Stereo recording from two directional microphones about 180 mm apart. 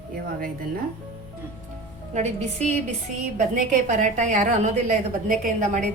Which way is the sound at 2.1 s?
40° right (ahead or behind).